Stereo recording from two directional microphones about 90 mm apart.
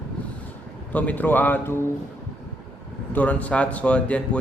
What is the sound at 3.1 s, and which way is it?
A man's voice, 15° left (ahead or behind).